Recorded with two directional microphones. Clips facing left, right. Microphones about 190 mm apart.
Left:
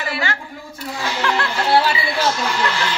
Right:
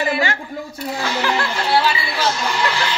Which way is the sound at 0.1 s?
20° right (ahead or behind).